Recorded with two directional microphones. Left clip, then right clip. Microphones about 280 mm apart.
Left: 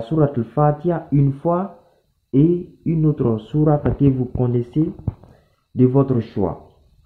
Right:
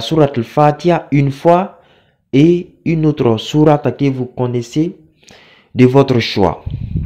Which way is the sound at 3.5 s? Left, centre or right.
Right.